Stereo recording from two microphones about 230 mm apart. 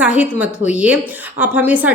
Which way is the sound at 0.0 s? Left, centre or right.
Centre.